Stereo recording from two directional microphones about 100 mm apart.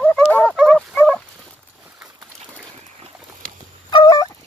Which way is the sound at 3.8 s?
45° left (ahead or behind).